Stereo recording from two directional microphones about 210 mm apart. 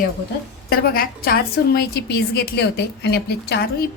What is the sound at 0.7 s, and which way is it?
A woman's voice, 45° left (ahead or behind).